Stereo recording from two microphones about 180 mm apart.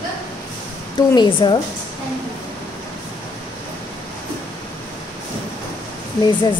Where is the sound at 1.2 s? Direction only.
25° left (ahead or behind).